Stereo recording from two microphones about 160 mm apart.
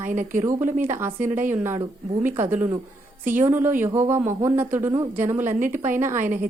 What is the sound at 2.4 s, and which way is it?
Speech, 15° right (ahead or behind).